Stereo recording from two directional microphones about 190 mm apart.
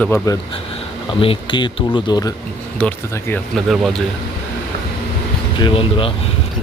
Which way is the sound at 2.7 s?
10° left (ahead or behind).